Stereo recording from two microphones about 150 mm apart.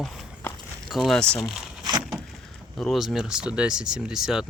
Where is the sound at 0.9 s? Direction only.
Centre (ahead or behind).